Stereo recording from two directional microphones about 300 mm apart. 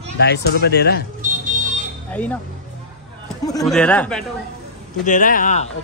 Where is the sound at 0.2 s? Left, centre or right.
Left.